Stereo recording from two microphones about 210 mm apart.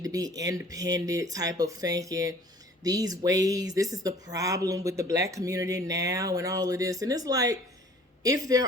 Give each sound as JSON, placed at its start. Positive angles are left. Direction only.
{"t": 0.0, "sound": "speech", "side_deg": -15}